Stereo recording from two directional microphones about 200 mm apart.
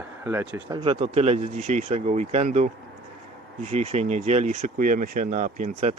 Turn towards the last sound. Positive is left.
turn(degrees=-35)  # may be behind; listen again after turning